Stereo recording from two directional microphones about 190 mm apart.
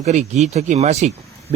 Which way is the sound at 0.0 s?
35° right (ahead or behind).